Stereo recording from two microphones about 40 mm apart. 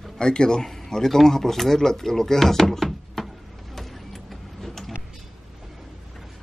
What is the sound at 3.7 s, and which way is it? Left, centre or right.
Vehicle, centre.